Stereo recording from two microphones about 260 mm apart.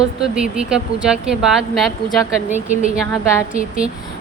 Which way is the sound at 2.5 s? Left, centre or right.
Right.